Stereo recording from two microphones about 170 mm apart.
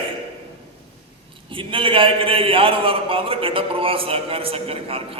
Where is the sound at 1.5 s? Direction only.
30° right (ahead or behind).